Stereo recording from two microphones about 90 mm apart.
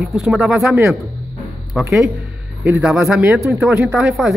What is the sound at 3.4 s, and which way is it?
Speech, 30° right (ahead or behind).